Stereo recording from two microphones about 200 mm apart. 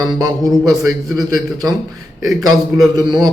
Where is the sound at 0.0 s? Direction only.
20° right (ahead or behind).